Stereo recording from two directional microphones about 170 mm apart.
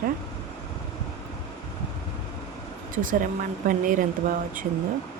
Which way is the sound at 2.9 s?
50° right (ahead or behind).